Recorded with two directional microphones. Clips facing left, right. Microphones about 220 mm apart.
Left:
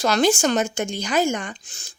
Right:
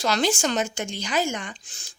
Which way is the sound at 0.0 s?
50° left (ahead or behind).